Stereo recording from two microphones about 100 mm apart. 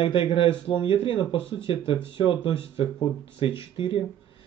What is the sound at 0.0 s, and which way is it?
Speech, 55° left (ahead or behind).